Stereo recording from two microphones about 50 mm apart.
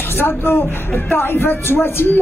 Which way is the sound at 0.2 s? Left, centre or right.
Left.